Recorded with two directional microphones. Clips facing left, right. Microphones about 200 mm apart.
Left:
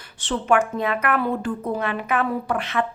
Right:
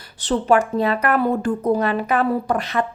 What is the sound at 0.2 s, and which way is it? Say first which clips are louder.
Speech: right 3 dB; 35° right (ahead or behind).